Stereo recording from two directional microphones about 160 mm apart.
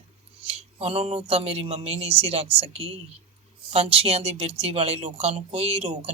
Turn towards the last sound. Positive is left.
turn(degrees=-40)  # may be behind; listen again after turning